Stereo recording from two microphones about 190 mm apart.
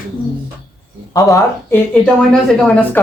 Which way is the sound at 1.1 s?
15° left (ahead or behind).